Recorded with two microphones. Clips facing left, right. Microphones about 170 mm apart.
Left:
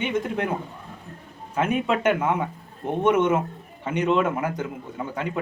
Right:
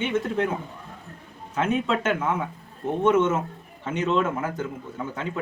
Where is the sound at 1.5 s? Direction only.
10° left (ahead or behind).